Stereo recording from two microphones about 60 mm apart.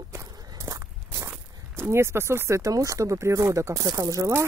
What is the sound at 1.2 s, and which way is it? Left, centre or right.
Speech, right.